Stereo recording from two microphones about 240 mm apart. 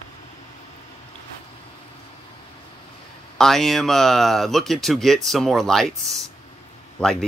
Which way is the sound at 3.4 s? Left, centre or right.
Centre.